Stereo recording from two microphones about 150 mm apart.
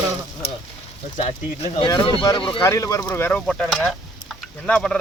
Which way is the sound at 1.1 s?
40° left (ahead or behind).